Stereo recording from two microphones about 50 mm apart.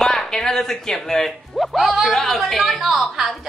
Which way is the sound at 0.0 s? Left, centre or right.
Centre.